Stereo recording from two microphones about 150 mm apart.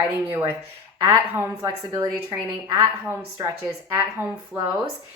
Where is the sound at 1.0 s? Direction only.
20° right (ahead or behind).